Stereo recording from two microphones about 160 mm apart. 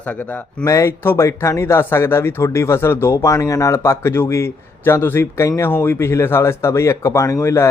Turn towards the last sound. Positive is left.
turn(degrees=20)  # may be behind; listen again after turning